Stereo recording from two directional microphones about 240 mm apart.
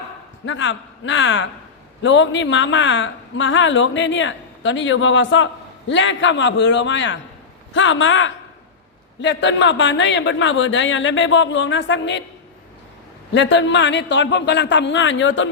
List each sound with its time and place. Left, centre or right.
0.4 s a man's voice: left
13.3 s a man's voice: left